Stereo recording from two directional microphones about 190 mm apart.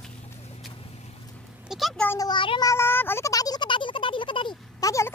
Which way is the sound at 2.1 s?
20° left (ahead or behind).